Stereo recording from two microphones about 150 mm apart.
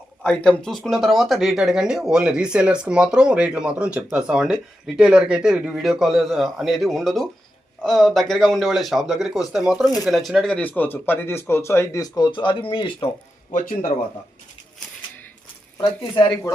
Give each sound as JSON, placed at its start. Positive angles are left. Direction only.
{"t": 0.2, "sound": "speech", "side_deg": 5}
{"t": 13.5, "sound": "a man's voice", "side_deg": 60}
{"t": 15.8, "sound": "speech", "side_deg": 30}